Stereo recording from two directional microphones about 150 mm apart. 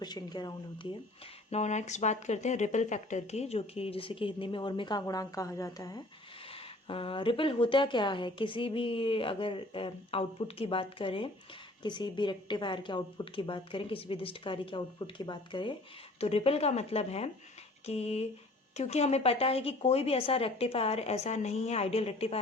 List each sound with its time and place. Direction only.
0.0 s speech: 30° left (ahead or behind)
1.5 s a woman's voice: 50° left (ahead or behind); by 6.0 s 25° left (ahead or behind)
6.5 s a woman's voice: 35° left (ahead or behind)